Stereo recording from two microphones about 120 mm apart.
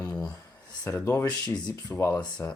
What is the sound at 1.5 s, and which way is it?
Speech, 10° left (ahead or behind).